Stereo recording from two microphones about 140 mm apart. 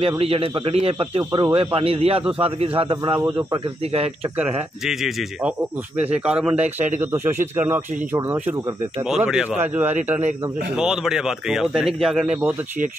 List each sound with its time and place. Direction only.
0.2 s speech: 40° right (ahead or behind)
1.3 s speech: 35° right (ahead or behind)
4.4 s speech: 5° right (ahead or behind)
9.0 s speech: 5° right (ahead or behind)
12.4 s speech: 15° right (ahead or behind)